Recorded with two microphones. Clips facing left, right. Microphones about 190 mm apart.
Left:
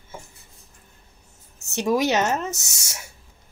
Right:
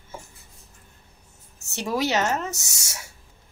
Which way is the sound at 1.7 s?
15° left (ahead or behind).